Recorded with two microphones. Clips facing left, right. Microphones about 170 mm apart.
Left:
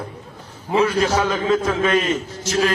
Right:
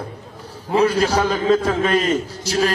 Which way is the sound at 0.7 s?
35° right (ahead or behind).